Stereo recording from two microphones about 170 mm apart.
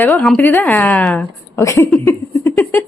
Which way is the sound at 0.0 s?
Centre (ahead or behind).